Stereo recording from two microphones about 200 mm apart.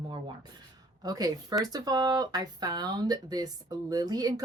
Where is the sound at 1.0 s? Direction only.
20° right (ahead or behind).